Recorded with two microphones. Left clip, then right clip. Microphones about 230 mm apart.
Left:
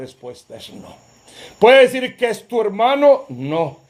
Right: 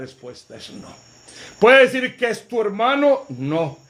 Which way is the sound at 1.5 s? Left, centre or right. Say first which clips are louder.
Left 2 dB; left.